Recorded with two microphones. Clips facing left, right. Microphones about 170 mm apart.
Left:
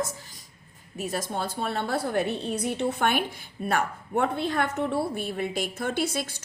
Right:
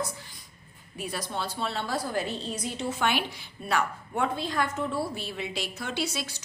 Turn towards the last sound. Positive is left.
turn(degrees=55)  # may be behind; listen again after turning